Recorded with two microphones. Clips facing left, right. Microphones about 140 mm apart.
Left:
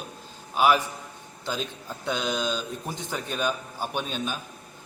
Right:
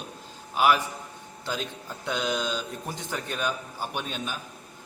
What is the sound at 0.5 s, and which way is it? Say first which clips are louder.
Speech: left 1 dB; 25° left (ahead or behind).